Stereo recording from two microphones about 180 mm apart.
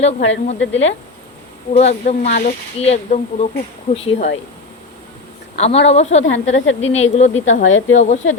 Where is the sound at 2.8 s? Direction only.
35° left (ahead or behind).